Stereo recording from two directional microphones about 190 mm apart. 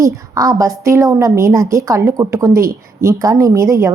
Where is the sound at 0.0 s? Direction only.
15° right (ahead or behind).